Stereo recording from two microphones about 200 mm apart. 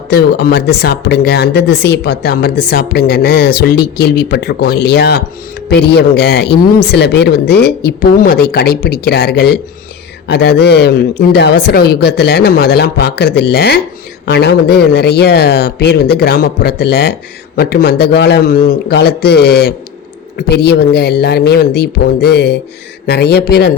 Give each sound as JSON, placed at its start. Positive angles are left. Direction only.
{"t": 0.1, "sound": "speech", "side_deg": 50}